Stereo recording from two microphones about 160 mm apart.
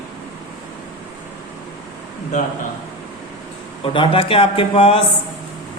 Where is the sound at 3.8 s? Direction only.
35° left (ahead or behind).